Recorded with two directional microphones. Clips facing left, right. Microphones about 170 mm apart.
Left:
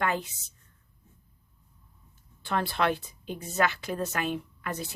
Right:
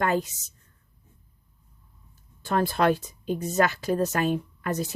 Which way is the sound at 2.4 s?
40° right (ahead or behind).